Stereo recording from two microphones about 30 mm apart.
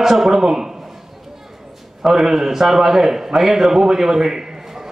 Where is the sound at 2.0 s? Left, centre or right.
Centre.